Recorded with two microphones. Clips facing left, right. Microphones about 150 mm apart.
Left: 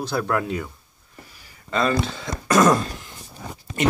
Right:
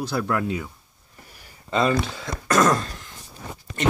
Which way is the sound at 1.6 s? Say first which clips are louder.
Even; 15° right (ahead or behind).